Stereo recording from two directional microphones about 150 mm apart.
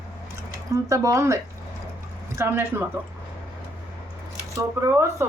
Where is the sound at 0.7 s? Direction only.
20° right (ahead or behind).